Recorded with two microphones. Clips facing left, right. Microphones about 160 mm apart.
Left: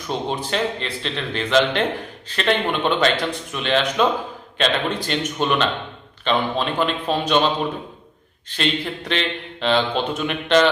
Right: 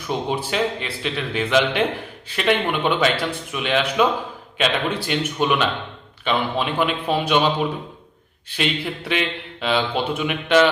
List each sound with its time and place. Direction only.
0.3 s a man's voice: 10° right (ahead or behind)
8.4 s a man's voice: 10° right (ahead or behind)